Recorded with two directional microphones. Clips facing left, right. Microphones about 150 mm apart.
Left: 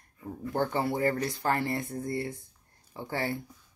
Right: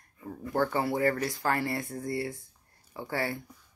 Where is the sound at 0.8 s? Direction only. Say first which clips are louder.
Even; 25° left (ahead or behind).